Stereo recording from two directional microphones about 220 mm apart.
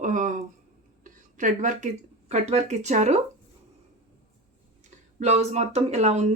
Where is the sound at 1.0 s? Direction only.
35° right (ahead or behind).